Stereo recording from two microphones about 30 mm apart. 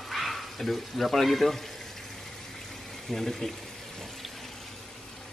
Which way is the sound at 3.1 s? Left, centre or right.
Centre.